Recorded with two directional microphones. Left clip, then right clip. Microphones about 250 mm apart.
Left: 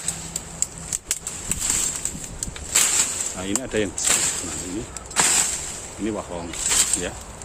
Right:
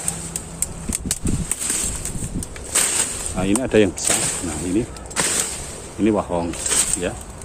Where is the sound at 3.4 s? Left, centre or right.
Centre.